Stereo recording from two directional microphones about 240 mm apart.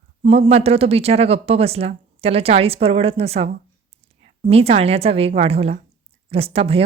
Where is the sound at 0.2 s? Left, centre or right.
Right.